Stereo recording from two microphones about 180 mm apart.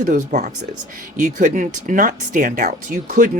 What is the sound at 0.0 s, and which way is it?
Speech, 45° right (ahead or behind).